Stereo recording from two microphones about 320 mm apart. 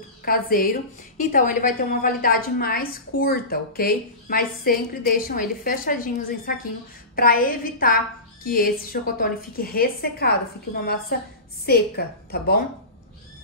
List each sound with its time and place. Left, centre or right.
0.2 s a woman's voice: left